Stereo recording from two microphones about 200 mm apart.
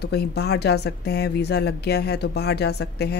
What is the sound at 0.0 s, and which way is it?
A woman's voice, 55° left (ahead or behind).